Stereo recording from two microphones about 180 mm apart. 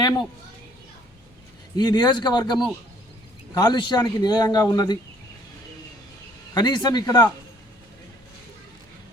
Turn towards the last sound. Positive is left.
turn(degrees=20)  # may be behind; listen again after turning